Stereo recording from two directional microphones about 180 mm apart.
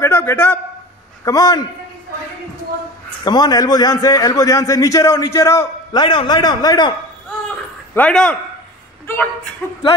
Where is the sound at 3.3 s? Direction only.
20° left (ahead or behind).